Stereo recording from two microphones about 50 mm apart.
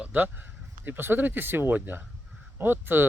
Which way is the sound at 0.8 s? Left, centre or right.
Right.